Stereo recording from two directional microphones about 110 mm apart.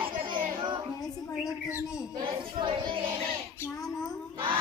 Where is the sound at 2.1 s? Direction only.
45° right (ahead or behind).